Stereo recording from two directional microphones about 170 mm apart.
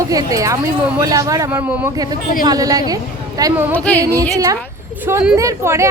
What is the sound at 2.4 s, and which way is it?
A woman's voice, 20° right (ahead or behind).